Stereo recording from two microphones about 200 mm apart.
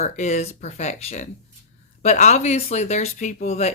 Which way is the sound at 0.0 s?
35° left (ahead or behind).